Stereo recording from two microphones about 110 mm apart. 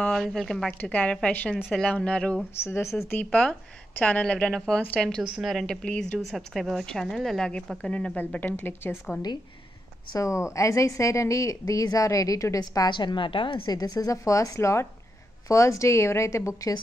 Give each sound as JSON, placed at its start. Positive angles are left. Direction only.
{"t": 0.1, "sound": "a woman's voice", "side_deg": 0}
{"t": 2.6, "sound": "a woman's voice", "side_deg": 25}
{"t": 10.1, "sound": "a woman's voice", "side_deg": 25}